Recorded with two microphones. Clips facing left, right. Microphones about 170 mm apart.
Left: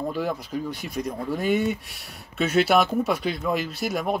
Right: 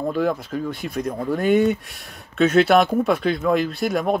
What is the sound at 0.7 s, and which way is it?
A man's voice, centre (ahead or behind).